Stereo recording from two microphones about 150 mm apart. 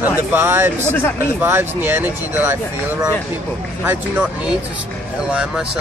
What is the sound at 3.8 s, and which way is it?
Speech, 10° right (ahead or behind).